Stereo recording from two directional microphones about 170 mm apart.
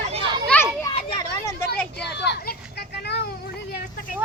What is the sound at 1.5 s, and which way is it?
Vehicle, 15° left (ahead or behind).